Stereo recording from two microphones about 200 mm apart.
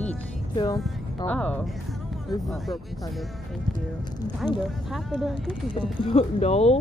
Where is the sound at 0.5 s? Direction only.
20° left (ahead or behind).